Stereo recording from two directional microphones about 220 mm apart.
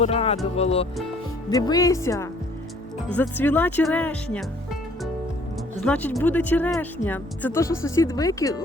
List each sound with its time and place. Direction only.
0.0 s speech: 30° left (ahead or behind)
1.5 s speech: 15° left (ahead or behind)
5.7 s speech: 5° left (ahead or behind)